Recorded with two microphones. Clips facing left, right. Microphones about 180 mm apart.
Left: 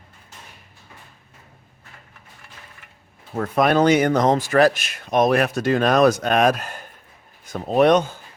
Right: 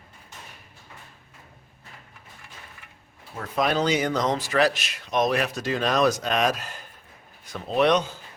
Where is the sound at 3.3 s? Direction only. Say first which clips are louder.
Left 7 dB; 55° left (ahead or behind).